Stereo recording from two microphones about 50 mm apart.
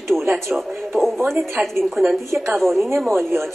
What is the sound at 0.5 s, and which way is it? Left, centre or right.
Speech, centre.